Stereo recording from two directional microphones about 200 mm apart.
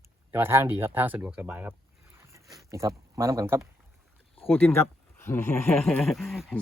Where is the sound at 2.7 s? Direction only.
15° right (ahead or behind).